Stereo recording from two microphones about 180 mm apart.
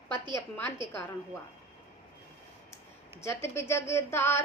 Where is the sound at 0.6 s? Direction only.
25° right (ahead or behind).